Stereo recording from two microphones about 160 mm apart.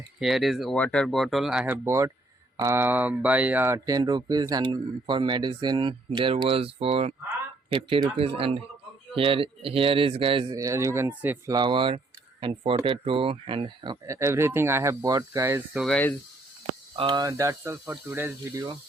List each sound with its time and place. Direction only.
0.2 s speech: centre (ahead or behind)
3.8 s speech: 25° right (ahead or behind)
10.5 s speech: 20° right (ahead or behind)
11.5 s speech: 30° right (ahead or behind)
15.8 s speech: 10° left (ahead or behind)
16.9 s speech: 30° right (ahead or behind)